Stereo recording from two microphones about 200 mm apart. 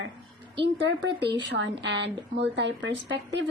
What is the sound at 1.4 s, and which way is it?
Speech, 65° right (ahead or behind).